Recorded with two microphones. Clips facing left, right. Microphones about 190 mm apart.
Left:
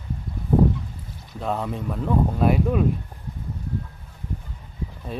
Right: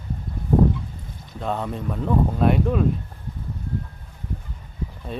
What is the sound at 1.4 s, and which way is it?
Speech, centre (ahead or behind).